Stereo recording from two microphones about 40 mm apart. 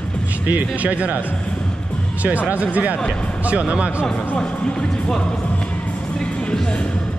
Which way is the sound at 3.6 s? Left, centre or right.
Right.